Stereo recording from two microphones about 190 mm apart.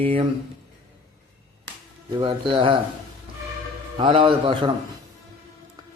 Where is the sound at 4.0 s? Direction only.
25° right (ahead or behind).